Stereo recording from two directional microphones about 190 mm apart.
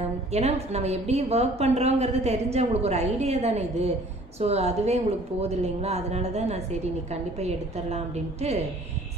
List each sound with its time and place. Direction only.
0.3 s a woman's voice: 35° right (ahead or behind)